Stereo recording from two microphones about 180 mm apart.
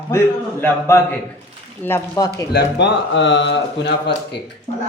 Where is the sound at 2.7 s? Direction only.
80° left.